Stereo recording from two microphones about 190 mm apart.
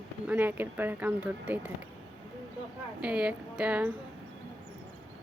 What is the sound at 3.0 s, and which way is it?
Speech, 5° right (ahead or behind).